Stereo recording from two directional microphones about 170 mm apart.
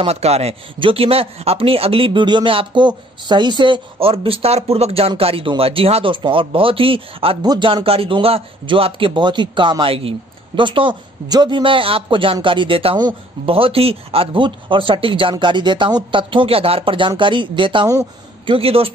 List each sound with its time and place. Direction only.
0.0 s speech: 40° right (ahead or behind)